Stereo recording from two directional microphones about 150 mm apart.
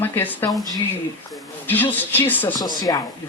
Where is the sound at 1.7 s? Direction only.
10° left (ahead or behind).